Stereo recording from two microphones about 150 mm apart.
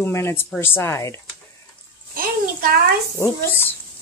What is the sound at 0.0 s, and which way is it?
Speech, 15° left (ahead or behind).